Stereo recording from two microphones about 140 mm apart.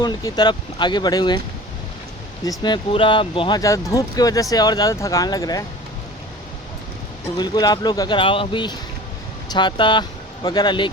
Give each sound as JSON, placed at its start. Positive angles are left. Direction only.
{"t": 0.0, "sound": "speech", "side_deg": 30}
{"t": 2.4, "sound": "speech", "side_deg": 30}
{"t": 3.6, "sound": "speech", "side_deg": 25}
{"t": 7.3, "sound": "speech", "side_deg": 30}